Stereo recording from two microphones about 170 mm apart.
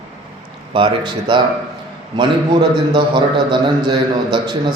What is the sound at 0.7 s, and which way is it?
A man's voice, 30° right (ahead or behind).